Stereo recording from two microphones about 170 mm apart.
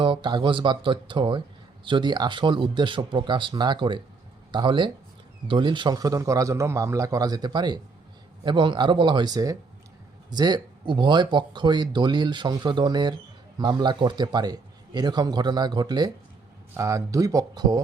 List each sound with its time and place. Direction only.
0.0 s speech: 30° right (ahead or behind)